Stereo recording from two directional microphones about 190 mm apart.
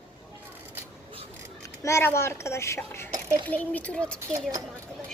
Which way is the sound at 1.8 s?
15° left (ahead or behind).